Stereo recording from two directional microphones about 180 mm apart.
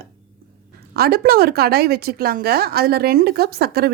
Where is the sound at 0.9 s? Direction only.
60° right (ahead or behind).